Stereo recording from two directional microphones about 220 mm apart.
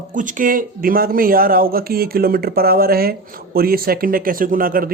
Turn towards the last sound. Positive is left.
turn(degrees=-40)  # may be behind; listen again after turning